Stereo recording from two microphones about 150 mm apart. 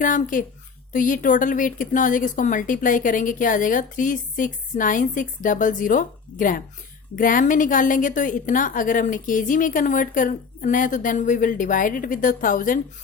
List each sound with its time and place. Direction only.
0.0 s speech: 60° left (ahead or behind)